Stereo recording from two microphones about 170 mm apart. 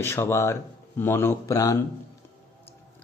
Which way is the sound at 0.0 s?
15° left (ahead or behind).